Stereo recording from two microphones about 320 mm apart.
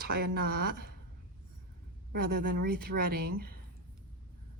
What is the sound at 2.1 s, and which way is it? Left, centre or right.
Speech, right.